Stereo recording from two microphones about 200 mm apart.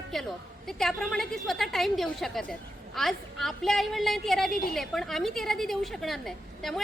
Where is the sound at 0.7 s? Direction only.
Centre (ahead or behind).